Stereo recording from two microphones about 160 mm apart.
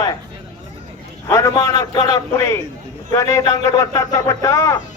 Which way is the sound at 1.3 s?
20° left (ahead or behind).